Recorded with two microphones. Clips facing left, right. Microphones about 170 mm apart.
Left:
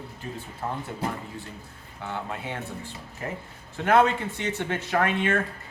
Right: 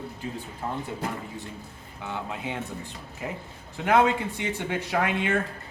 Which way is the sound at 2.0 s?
15° right (ahead or behind).